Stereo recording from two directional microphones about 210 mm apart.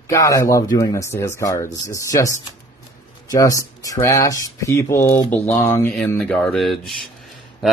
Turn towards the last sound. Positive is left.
turn(degrees=0)  # may be behind; listen again after turning